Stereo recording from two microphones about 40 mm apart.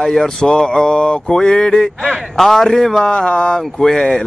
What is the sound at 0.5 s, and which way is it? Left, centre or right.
Mantra, left.